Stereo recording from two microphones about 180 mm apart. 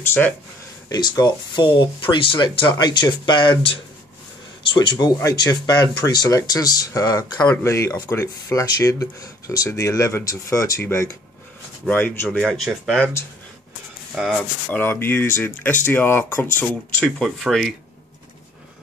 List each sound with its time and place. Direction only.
0.0 s speech: 10° left (ahead or behind)
0.8 s speech: 20° left (ahead or behind); by 13.1 s centre (ahead or behind)
14.1 s speech: centre (ahead or behind)